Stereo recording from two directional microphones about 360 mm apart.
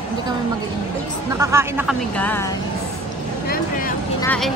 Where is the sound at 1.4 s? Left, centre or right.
Centre.